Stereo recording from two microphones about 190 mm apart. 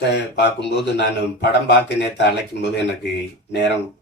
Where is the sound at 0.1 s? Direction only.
60° left (ahead or behind).